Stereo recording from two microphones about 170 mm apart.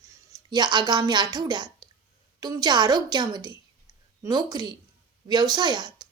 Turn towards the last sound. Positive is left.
turn(degrees=-25)  # may be behind; listen again after turning